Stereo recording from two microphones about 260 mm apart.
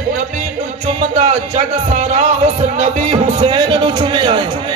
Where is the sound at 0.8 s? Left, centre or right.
Right.